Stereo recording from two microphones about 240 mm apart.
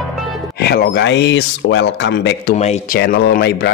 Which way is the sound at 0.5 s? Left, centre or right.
Left.